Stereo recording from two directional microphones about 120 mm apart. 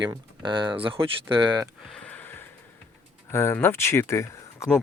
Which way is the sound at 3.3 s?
20° left (ahead or behind).